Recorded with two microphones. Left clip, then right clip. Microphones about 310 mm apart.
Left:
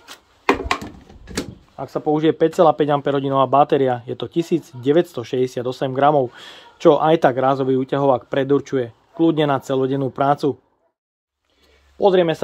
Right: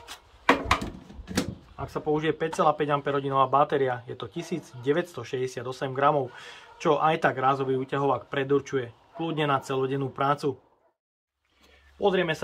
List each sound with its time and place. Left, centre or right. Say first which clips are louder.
1.8 s speech: left 8 dB; left
12.0 s speech: left 9 dB; left